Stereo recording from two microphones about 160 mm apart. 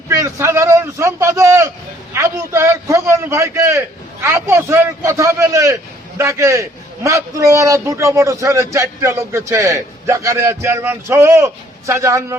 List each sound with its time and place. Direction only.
0.1 s a man's voice: 20° right (ahead or behind)